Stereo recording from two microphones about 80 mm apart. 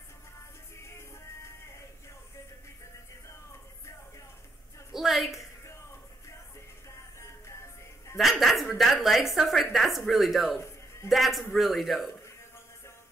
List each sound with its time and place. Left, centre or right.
4.9 s a sound: centre
7.2 s music: left
8.2 s a woman's voice: centre